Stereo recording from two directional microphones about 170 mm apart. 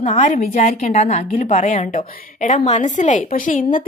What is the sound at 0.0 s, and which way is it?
A woman's voice, 45° left (ahead or behind).